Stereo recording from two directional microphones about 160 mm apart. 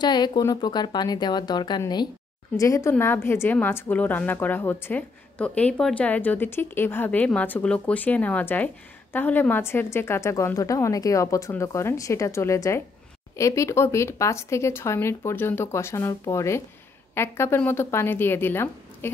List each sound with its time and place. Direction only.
0.0 s a woman's voice: 25° left (ahead or behind)